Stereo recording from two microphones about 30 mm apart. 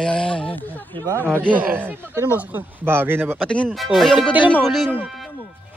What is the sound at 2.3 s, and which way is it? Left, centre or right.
Speech, right.